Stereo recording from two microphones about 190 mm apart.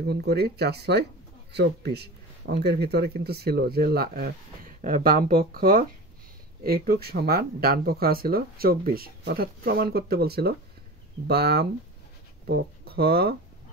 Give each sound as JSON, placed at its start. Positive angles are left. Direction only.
{"t": 0.0, "sound": "speech", "side_deg": -60}